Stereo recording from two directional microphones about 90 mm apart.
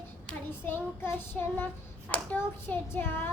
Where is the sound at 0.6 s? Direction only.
25° left (ahead or behind).